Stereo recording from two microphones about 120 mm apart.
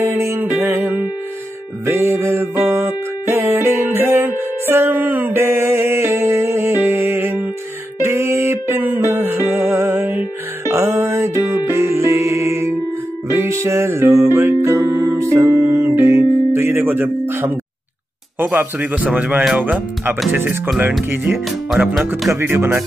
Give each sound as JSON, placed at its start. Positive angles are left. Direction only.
{"t": 0.0, "sound": "music", "side_deg": -20}
{"t": 18.4, "sound": "a man's voice", "side_deg": -15}